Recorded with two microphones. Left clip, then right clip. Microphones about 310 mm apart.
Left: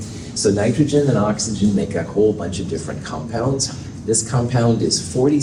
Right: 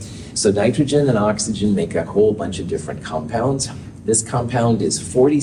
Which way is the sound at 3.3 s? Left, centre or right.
Right.